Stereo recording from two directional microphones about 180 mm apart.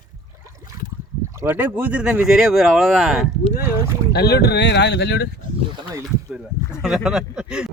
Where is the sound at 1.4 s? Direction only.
10° right (ahead or behind).